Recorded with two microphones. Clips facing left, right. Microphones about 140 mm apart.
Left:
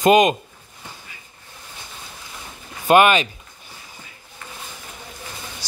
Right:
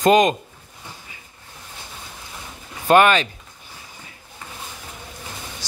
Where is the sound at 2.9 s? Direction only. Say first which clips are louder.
Even; 10° left (ahead or behind).